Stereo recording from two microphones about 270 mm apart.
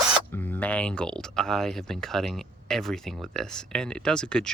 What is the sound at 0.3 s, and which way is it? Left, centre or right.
Speech, centre.